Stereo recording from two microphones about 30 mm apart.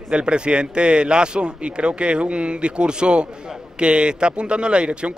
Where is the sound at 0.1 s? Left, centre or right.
Right.